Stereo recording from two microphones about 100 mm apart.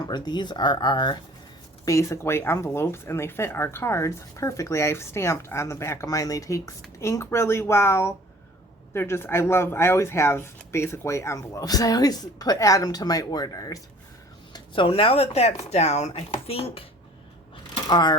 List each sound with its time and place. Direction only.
0.1 s speech: 45° left (ahead or behind)
1.8 s speech: 30° left (ahead or behind)
14.5 s speech: 60° left (ahead or behind); by 16.8 s 80° left
17.7 s a sound: 45° left (ahead or behind)